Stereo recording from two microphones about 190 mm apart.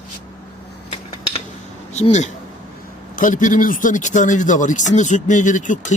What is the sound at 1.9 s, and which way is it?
Speech, 35° left (ahead or behind).